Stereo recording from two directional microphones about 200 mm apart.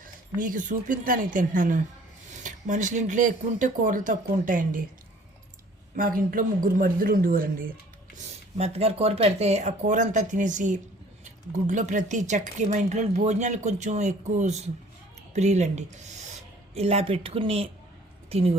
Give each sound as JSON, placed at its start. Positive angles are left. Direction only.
{"t": 0.0, "sound": "speech", "side_deg": -40}
{"t": 6.0, "sound": "speech", "side_deg": -45}
{"t": 8.5, "sound": "speech", "side_deg": -30}